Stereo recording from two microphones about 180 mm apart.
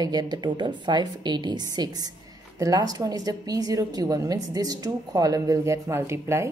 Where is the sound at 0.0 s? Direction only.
20° right (ahead or behind).